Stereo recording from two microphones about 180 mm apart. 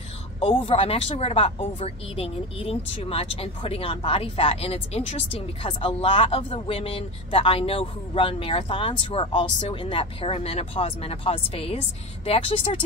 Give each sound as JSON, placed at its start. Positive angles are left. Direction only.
{"t": 0.4, "sound": "speech", "side_deg": 30}